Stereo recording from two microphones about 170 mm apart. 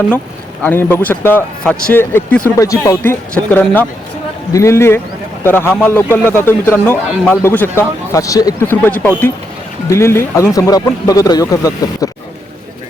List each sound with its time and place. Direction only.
0.6 s a man's voice: 10° left (ahead or behind)